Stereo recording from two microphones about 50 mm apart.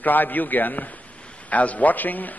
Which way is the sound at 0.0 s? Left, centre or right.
Left.